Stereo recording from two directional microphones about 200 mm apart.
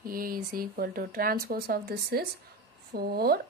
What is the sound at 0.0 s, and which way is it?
Speech, 45° right (ahead or behind).